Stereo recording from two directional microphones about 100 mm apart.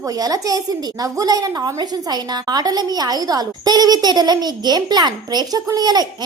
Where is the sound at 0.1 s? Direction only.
35° right (ahead or behind).